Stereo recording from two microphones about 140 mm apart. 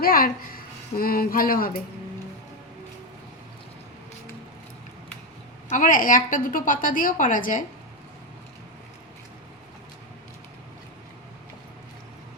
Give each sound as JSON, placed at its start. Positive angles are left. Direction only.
{"t": 0.0, "sound": "a woman's voice", "side_deg": 90}
{"t": 5.6, "sound": "a woman's voice", "side_deg": 70}